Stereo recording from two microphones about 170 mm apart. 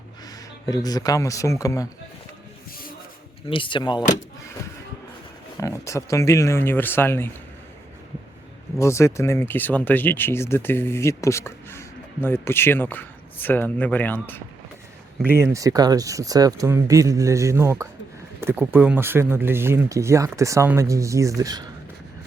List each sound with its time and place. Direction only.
0.3 s speech: 20° left (ahead or behind)
3.5 s speech: 30° left (ahead or behind)
5.5 s speech: 15° left (ahead or behind)
8.8 s speech: 15° left (ahead or behind)
15.3 s speech: 15° right (ahead or behind)